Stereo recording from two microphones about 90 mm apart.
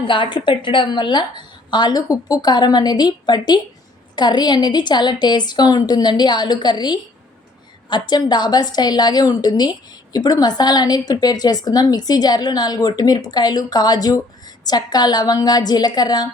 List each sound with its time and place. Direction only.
0.0 s a woman's voice: 65° left (ahead or behind); by 16.3 s 50° left (ahead or behind)